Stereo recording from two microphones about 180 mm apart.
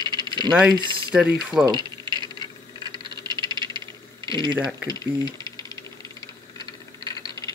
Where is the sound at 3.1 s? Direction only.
25° right (ahead or behind).